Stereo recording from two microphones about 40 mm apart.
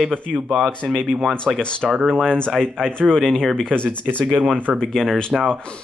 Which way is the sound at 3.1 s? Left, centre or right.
Centre.